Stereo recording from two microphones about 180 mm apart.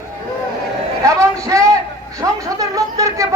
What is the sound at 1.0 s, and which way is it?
A man's voice, 15° right (ahead or behind).